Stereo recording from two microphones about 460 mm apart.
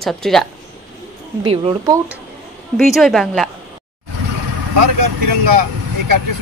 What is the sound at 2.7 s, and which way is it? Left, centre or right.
Speech, centre.